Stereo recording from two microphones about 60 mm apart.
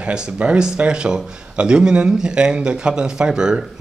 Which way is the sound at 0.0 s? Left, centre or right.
Centre.